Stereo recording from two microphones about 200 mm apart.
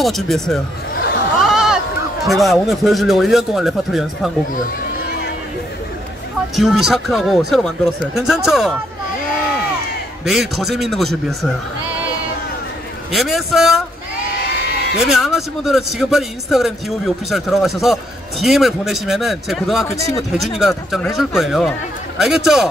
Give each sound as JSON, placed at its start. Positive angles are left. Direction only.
{"t": 0.0, "sound": "speech", "side_deg": 0}
{"t": 1.4, "sound": "sheep", "side_deg": 0}
{"t": 2.2, "sound": "speech", "side_deg": 0}
{"t": 6.5, "sound": "speech", "side_deg": 0}
{"t": 10.2, "sound": "speech", "side_deg": 0}
{"t": 13.1, "sound": "speech", "side_deg": 0}
{"t": 14.7, "sound": "a sound", "side_deg": 50}
{"t": 15.0, "sound": "speech", "side_deg": 0}